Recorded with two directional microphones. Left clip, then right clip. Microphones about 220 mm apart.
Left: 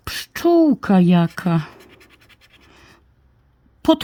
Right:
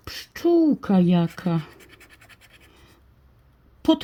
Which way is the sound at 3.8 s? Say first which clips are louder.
Left 4 dB; 35° left (ahead or behind).